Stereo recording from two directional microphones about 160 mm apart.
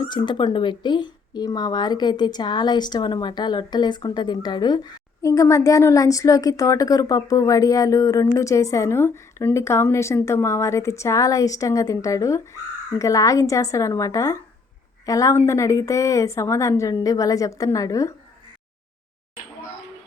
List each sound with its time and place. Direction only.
0.0 s speech: 30° left (ahead or behind)